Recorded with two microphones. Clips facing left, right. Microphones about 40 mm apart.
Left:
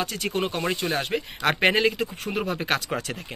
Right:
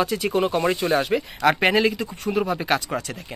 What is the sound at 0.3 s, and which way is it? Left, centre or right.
Speech, centre.